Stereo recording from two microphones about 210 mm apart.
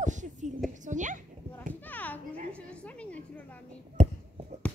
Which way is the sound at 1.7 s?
10° left (ahead or behind).